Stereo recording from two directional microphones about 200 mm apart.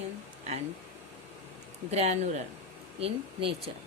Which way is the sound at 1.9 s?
35° right (ahead or behind).